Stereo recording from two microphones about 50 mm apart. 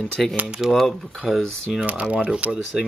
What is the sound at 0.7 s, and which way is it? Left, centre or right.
Speech, centre.